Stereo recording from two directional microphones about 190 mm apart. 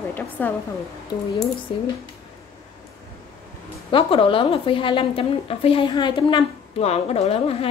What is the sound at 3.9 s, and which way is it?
A woman's voice, 30° left (ahead or behind).